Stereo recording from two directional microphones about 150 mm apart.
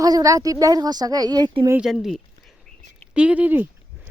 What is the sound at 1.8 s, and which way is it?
Speech, centre (ahead or behind).